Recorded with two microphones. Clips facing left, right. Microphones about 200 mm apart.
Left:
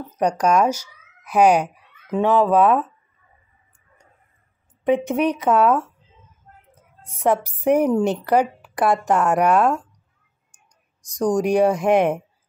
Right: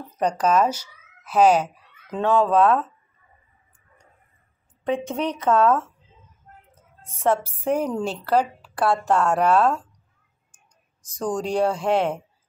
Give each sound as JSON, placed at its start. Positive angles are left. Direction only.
{"t": 0.2, "sound": "speech", "side_deg": 10}
{"t": 4.8, "sound": "a woman's voice", "side_deg": 15}
{"t": 7.1, "sound": "a woman's voice", "side_deg": 15}
{"t": 11.1, "sound": "a woman's voice", "side_deg": 15}